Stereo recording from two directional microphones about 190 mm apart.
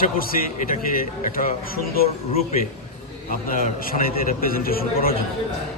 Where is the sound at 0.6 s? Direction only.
50° left (ahead or behind).